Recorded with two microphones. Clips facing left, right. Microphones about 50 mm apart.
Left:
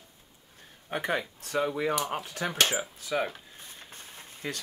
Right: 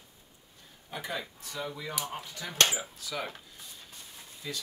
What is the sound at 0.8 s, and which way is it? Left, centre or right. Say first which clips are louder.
Speech: left 7 dB; left.